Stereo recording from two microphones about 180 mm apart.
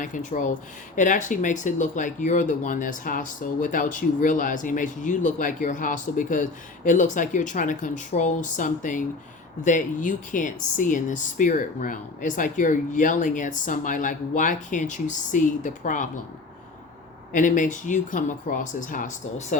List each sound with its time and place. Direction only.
0.0 s speech: 45° left (ahead or behind)
17.3 s speech: 45° left (ahead or behind)